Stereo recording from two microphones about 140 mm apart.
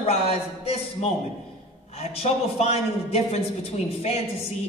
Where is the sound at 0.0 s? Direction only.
45° left (ahead or behind).